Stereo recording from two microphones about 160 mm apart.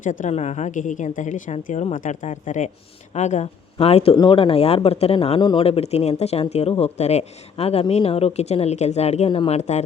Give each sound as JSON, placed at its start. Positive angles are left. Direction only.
{"t": 0.0, "sound": "a woman's voice", "side_deg": 55}